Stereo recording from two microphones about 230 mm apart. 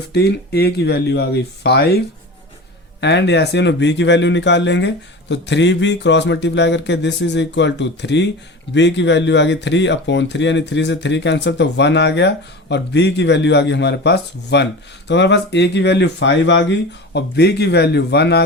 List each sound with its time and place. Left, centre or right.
0.1 s speech: left
3.0 s speech: left